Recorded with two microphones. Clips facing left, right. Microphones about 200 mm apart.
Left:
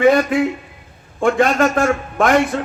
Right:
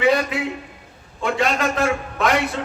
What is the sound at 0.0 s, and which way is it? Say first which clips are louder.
A man's voice: left 6 dB; 50° left (ahead or behind).